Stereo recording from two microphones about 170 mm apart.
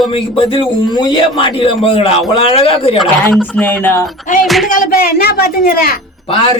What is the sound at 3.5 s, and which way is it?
Speech, 10° left (ahead or behind).